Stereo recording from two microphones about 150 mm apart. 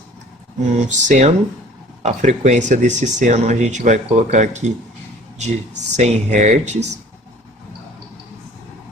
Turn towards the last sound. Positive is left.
turn(degrees=-50)  # may be behind; listen again after turning